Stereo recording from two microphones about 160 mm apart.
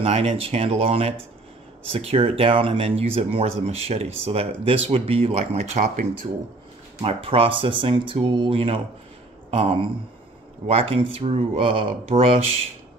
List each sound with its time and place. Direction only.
0.0 s speech: 40° right (ahead or behind)
7.0 s speech: 35° right (ahead or behind)